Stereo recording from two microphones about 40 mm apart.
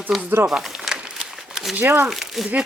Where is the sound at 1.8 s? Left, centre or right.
Right.